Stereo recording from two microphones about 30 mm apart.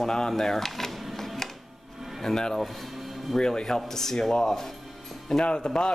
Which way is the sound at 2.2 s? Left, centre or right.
Centre.